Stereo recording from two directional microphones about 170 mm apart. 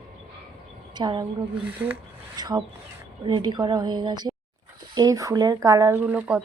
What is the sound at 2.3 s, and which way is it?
Speech, 20° right (ahead or behind).